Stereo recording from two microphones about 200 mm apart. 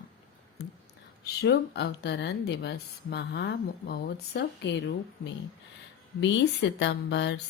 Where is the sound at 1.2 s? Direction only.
55° left (ahead or behind).